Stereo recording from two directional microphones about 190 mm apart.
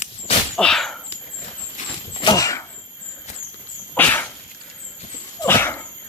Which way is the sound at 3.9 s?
10° left (ahead or behind).